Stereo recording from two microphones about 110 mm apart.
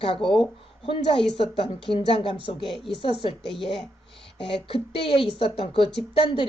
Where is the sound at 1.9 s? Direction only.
55° left (ahead or behind).